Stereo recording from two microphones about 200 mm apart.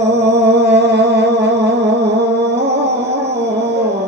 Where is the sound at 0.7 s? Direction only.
60° right (ahead or behind).